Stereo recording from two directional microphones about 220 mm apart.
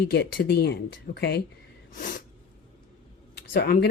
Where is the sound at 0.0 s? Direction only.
50° left (ahead or behind).